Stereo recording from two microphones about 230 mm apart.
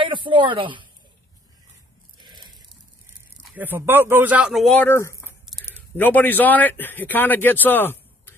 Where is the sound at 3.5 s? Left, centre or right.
Centre.